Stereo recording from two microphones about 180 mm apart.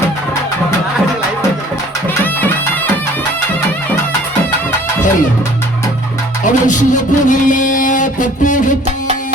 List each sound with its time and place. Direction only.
2.2 s music: 10° left (ahead or behind)
6.4 s music: 45° left (ahead or behind)